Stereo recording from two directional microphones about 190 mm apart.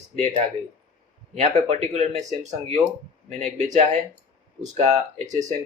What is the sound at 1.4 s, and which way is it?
Speech, 35° right (ahead or behind).